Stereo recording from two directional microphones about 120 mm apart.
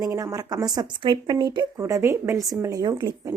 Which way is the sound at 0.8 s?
40° right (ahead or behind).